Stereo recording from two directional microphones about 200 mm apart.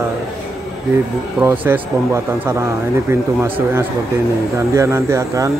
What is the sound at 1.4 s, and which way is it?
Speech, 10° right (ahead or behind).